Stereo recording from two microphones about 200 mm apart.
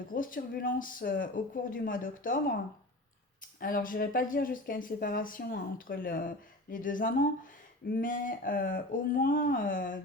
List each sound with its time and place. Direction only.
0.1 s speech: 45° left (ahead or behind)
3.6 s speech: 45° left (ahead or behind)